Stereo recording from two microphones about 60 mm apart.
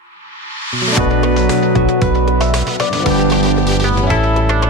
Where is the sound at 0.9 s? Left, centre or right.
Centre.